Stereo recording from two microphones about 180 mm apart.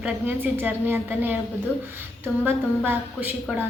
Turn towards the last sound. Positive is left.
turn(degrees=-10)  # may be behind; listen again after turning